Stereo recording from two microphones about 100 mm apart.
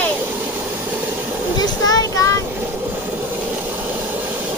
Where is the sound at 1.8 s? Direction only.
35° left (ahead or behind).